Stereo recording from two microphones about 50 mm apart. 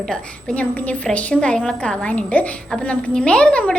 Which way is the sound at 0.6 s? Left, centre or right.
Left.